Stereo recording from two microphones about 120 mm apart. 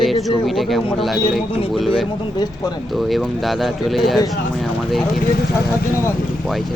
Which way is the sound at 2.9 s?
Centre (ahead or behind).